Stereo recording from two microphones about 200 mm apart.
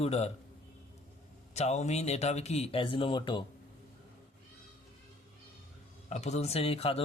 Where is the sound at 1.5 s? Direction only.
35° left (ahead or behind).